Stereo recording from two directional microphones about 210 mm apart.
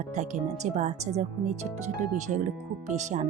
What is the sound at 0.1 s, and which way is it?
Speech, 35° right (ahead or behind).